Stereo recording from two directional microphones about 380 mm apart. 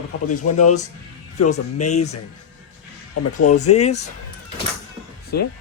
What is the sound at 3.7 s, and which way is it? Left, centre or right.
Speech, left.